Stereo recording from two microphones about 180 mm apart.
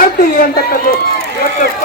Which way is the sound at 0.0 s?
55° left (ahead or behind).